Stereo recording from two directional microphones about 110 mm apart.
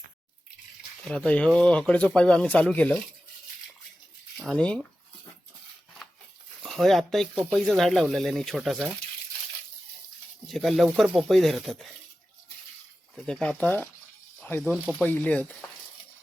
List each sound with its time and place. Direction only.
1.0 s speech: 10° left (ahead or behind)
4.4 s a sound: centre (ahead or behind)
4.6 s speech: 10° left (ahead or behind)
6.6 s speech: centre (ahead or behind)
10.4 s speech: centre (ahead or behind)
13.1 s speech: 10° left (ahead or behind)
14.6 s speech: 10° right (ahead or behind)
14.9 s speech: 15° left (ahead or behind)